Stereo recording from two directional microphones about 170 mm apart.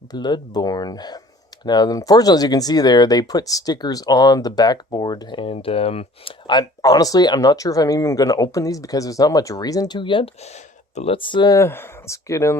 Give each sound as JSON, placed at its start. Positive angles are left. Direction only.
{"t": 0.1, "sound": "speech", "side_deg": 25}